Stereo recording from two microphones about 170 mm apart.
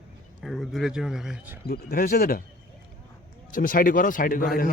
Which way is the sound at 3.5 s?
55° left (ahead or behind).